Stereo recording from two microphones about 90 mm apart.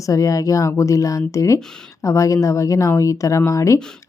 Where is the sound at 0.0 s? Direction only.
40° left (ahead or behind).